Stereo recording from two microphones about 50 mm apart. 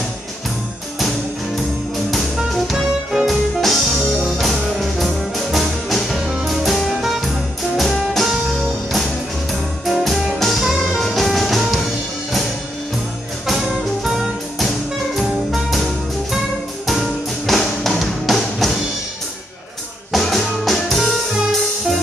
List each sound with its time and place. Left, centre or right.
2.0 s music: centre
8.3 s music: centre
13.5 s music: centre
20.1 s music: centre